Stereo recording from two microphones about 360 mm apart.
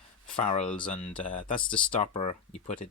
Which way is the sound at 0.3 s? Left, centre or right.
Centre.